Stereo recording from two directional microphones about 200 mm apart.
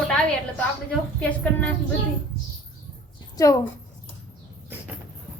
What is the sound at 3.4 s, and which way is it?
Speech, 20° left (ahead or behind).